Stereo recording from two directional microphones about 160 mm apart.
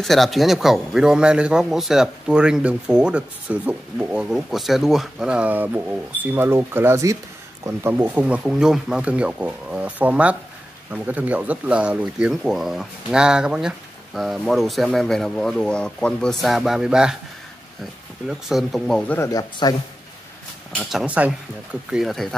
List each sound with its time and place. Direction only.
0.0 s a man's voice: centre (ahead or behind)
18.5 s a man's voice: centre (ahead or behind)
19.1 s speech: 20° left (ahead or behind)
20.8 s a man's voice: 5° right (ahead or behind)